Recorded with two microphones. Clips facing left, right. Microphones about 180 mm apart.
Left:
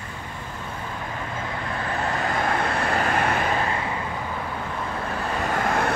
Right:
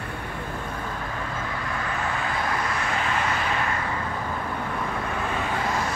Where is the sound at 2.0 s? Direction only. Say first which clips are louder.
Left 5 dB; 40° left (ahead or behind).